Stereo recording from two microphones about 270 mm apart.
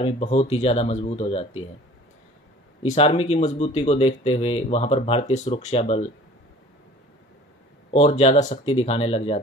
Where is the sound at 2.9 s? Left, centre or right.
Left.